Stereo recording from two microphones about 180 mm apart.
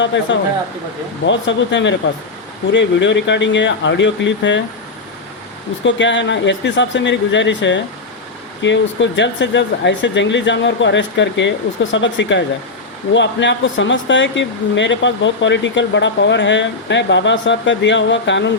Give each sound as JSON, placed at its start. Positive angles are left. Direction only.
{"t": 0.1, "sound": "speech", "side_deg": 90}
{"t": 2.7, "sound": "speech", "side_deg": 90}
{"t": 5.8, "sound": "speech", "side_deg": 90}